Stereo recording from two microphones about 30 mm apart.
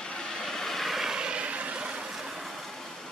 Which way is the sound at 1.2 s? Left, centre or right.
Right.